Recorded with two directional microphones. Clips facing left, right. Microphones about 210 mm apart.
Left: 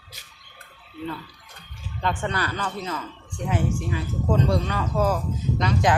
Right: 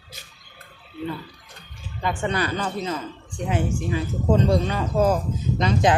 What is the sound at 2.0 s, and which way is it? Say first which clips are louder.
Speech: right 2 dB; 15° right (ahead or behind).